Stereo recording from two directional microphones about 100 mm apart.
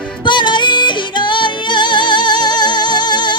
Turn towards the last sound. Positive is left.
turn(degrees=45)  # may be behind; listen again after turning